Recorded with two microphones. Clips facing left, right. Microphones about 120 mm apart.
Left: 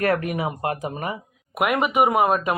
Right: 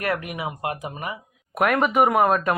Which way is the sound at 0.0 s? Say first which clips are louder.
Left 5 dB; 40° left (ahead or behind).